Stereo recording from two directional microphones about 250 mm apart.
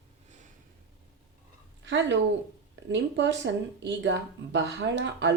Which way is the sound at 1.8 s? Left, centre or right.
Right.